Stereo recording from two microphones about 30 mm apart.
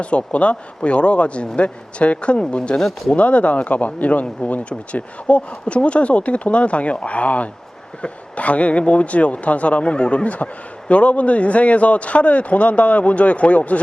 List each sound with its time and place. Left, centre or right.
0.0 s a man's voice: left
3.2 s speech: left
10.2 s speech: left